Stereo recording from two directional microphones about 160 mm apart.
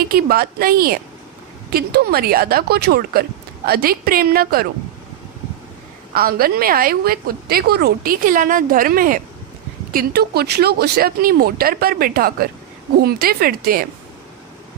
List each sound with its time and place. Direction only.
0.1 s speech: 70° right (ahead or behind)
6.1 s a woman's voice: 65° right (ahead or behind)
9.9 s speech: 70° right (ahead or behind)